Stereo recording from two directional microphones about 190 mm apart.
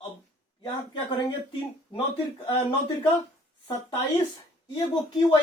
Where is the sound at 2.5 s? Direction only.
25° left (ahead or behind).